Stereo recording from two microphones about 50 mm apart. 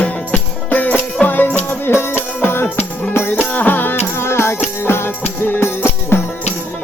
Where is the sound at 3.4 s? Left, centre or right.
Left.